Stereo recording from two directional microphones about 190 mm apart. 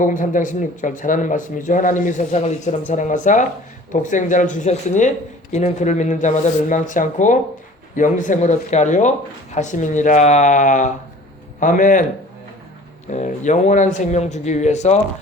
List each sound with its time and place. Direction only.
0.0 s speech: 45° left (ahead or behind)
13.1 s speech: 40° left (ahead or behind)